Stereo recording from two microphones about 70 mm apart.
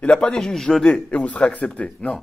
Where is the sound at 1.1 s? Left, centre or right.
Centre.